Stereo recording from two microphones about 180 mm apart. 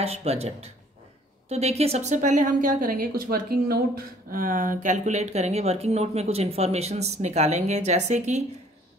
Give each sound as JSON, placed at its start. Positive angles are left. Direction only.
{"t": 0.0, "sound": "a woman's voice", "side_deg": -35}